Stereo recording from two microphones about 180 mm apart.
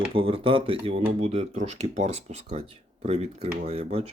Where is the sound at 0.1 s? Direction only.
30° right (ahead or behind).